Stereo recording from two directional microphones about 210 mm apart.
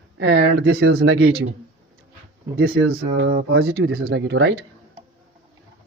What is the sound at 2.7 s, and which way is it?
A man's voice, 45° right (ahead or behind).